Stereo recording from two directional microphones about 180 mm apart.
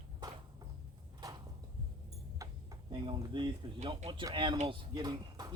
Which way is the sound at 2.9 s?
30° right (ahead or behind).